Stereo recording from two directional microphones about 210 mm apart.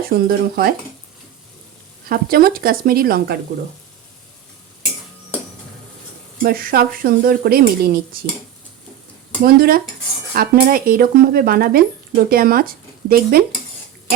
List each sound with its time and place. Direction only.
0.1 s speech: 45° right (ahead or behind)
2.0 s speech: 45° right (ahead or behind)
6.4 s speech: 45° right (ahead or behind)
9.4 s speech: 45° right (ahead or behind)